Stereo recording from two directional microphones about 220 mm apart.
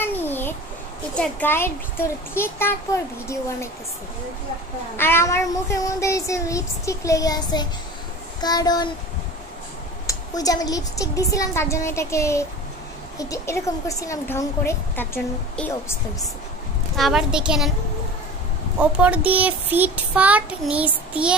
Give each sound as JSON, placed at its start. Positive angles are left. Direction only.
{"t": 0.0, "sound": "babbling", "side_deg": 10}
{"t": 1.1, "sound": "child singing", "side_deg": 5}
{"t": 4.9, "sound": "child singing", "side_deg": 10}
{"t": 10.0, "sound": "child singing", "side_deg": 15}
{"t": 16.9, "sound": "a child's voice", "side_deg": 0}
{"t": 18.8, "sound": "a child's voice", "side_deg": -5}